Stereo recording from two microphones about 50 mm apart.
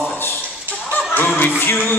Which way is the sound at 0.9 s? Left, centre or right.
Left.